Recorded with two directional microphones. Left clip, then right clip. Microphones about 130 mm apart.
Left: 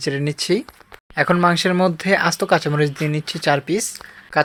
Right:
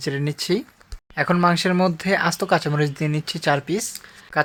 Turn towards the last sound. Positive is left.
turn(degrees=25)  # may be behind; listen again after turning